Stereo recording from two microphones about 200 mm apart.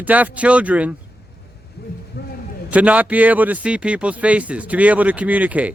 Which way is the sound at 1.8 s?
50° left (ahead or behind).